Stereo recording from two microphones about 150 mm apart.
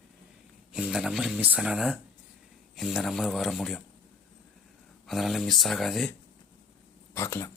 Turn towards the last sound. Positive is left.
turn(degrees=15)  # may be behind; listen again after turning